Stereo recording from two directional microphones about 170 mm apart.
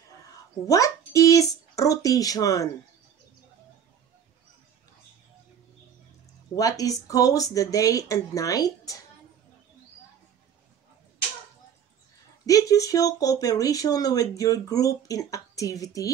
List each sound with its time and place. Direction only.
0.7 s a child's voice: 20° left (ahead or behind)
6.5 s speech: 20° left (ahead or behind)
12.4 s speech: 20° left (ahead or behind)